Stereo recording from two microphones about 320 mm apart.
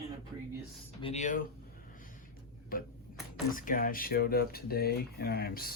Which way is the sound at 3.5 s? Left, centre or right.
Left.